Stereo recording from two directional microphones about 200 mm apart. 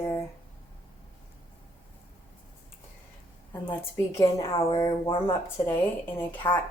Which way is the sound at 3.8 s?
15° left (ahead or behind).